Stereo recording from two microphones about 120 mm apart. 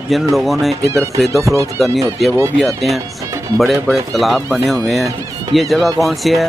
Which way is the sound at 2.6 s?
Centre (ahead or behind).